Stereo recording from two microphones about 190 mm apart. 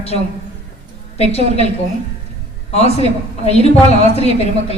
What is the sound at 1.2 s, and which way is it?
Speech, 35° left (ahead or behind).